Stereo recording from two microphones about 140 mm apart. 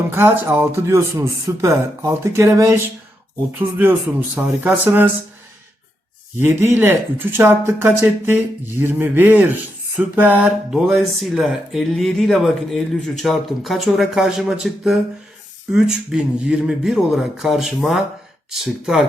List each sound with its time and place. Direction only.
0.1 s speech: 15° right (ahead or behind)
4.4 s speech: 15° right (ahead or behind)
6.4 s speech: 15° right (ahead or behind)
10.2 s a sound: 10° right (ahead or behind)